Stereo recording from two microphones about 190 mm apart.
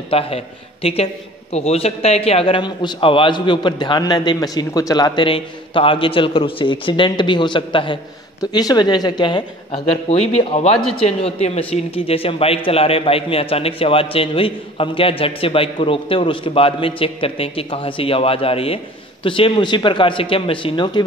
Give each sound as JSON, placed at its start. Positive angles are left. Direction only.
{"t": 0.1, "sound": "a man's voice", "side_deg": 30}